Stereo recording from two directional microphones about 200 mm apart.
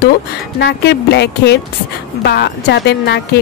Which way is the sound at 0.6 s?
60° left (ahead or behind).